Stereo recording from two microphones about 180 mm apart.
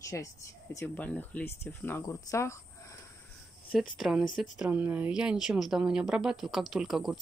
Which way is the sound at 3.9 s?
Centre (ahead or behind).